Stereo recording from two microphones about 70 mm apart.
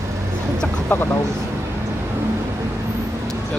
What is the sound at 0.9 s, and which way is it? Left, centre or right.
Speech, left.